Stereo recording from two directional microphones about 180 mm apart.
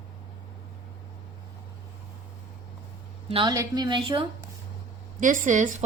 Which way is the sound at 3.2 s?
30° right (ahead or behind).